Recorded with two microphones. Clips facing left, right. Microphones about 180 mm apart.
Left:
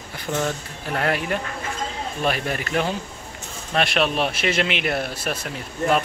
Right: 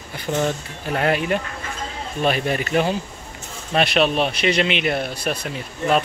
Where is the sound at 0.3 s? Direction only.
20° right (ahead or behind).